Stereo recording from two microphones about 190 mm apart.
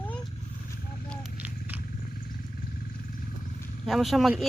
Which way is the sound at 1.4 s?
10° right (ahead or behind).